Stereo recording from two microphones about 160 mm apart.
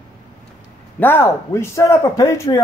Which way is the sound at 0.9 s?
15° left (ahead or behind).